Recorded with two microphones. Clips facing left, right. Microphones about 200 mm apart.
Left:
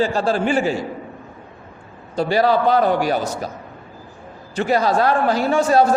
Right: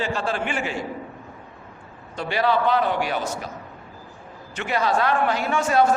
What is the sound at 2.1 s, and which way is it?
A man's voice, 35° left (ahead or behind).